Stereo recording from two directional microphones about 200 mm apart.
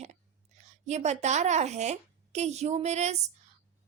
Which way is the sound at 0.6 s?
35° right (ahead or behind).